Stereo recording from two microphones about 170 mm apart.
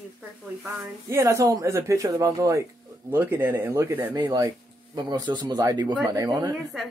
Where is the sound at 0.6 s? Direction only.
15° right (ahead or behind).